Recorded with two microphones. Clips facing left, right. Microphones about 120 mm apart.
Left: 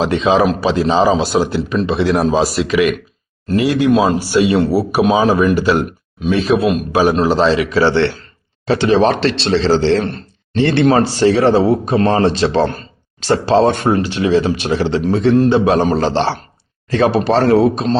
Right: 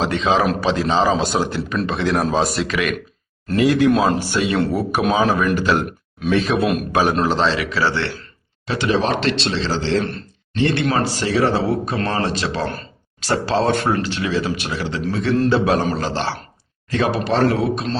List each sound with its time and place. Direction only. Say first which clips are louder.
0.0 s a man's voice: left 5 dB; 15° left (ahead or behind); by 17.9 s 30° left (ahead or behind)